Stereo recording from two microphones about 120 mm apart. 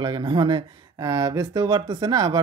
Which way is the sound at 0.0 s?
40° right (ahead or behind).